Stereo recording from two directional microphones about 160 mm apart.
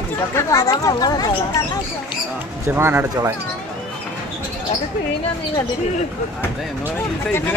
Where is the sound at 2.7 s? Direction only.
15° right (ahead or behind).